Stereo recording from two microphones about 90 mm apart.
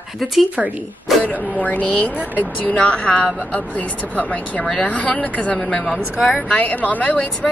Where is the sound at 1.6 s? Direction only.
15° left (ahead or behind).